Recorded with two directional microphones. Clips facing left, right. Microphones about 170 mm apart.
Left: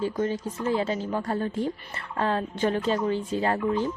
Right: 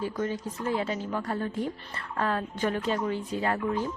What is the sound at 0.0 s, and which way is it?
A woman's voice, 30° left (ahead or behind).